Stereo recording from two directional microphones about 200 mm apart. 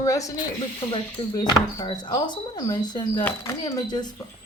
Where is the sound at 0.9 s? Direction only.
20° left (ahead or behind).